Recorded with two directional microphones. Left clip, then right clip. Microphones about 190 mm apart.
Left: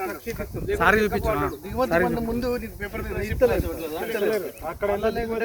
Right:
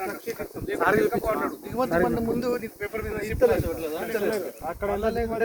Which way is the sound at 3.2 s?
45° right (ahead or behind).